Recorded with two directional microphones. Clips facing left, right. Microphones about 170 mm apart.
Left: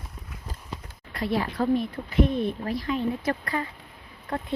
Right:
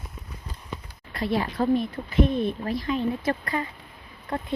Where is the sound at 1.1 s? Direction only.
25° right (ahead or behind).